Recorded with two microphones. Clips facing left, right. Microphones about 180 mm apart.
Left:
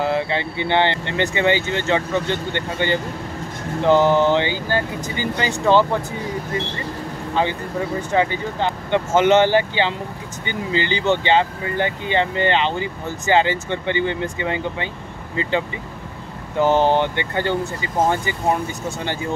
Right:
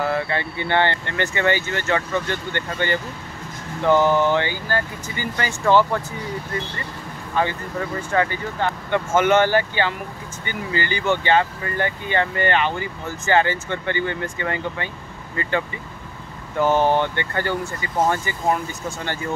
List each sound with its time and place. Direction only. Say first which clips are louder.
0.0 s speech: left 2 dB; 20° left (ahead or behind)
7.3 s speech: left 1 dB; 20° left (ahead or behind)
16.5 s speech: left 2 dB; 20° left (ahead or behind)